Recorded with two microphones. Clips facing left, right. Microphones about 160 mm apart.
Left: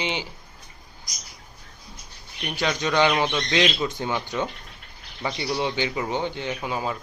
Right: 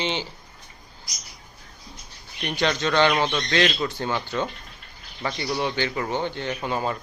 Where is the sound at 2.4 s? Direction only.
5° left (ahead or behind).